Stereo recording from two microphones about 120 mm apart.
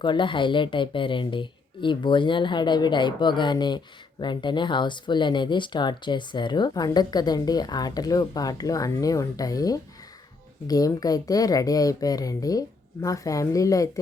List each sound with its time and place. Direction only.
0.0 s speech: 40° left (ahead or behind)